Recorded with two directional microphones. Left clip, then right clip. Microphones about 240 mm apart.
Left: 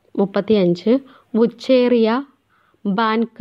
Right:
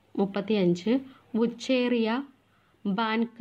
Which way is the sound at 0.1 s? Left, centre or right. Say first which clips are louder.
Left 11 dB; left.